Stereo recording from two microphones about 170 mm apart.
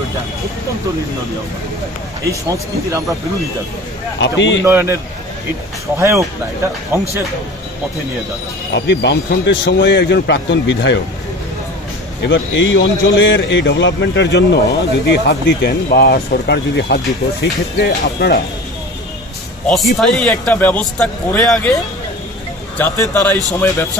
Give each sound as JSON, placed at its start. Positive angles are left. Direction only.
{"t": 2.2, "sound": "speech", "side_deg": -20}
{"t": 4.2, "sound": "a man's voice", "side_deg": 90}
{"t": 4.6, "sound": "a man's voice", "side_deg": -15}
{"t": 5.9, "sound": "a man's voice", "side_deg": -15}
{"t": 8.7, "sound": "a man's voice", "side_deg": 90}
{"t": 12.3, "sound": "a man's voice", "side_deg": 90}
{"t": 19.6, "sound": "speech", "side_deg": 0}
{"t": 22.8, "sound": "speech", "side_deg": 10}